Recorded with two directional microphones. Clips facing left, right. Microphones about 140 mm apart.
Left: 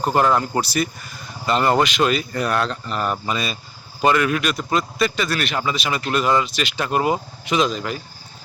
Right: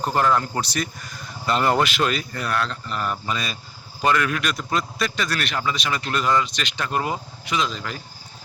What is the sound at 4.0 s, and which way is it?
Speech, 10° left (ahead or behind).